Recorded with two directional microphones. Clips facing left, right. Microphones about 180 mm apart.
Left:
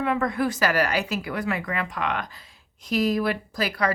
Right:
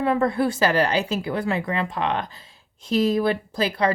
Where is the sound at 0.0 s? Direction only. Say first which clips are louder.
Right 3 dB; 30° right (ahead or behind).